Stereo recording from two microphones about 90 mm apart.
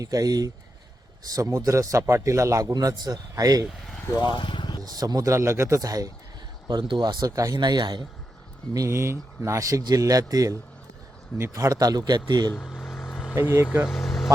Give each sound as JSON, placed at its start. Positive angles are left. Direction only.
{"t": 0.0, "sound": "a man's voice", "side_deg": -40}
{"t": 4.2, "sound": "vehicle", "side_deg": 60}
{"t": 4.8, "sound": "speech", "side_deg": -45}
{"t": 5.3, "sound": "a man's voice", "side_deg": -30}
{"t": 6.7, "sound": "speech", "side_deg": -60}
{"t": 8.7, "sound": "a man's voice", "side_deg": -35}
{"t": 13.3, "sound": "speech", "side_deg": -30}
{"t": 13.8, "sound": "vehicle", "side_deg": 0}